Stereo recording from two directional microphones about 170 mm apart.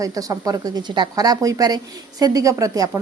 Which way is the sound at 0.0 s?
20° right (ahead or behind).